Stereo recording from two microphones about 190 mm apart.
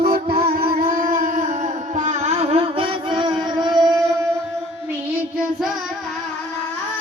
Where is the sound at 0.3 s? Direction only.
30° right (ahead or behind).